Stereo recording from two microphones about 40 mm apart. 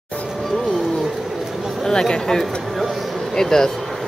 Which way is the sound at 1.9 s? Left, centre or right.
Centre.